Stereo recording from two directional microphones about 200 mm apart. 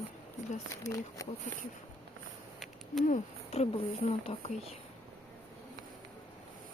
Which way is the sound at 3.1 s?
30° left (ahead or behind).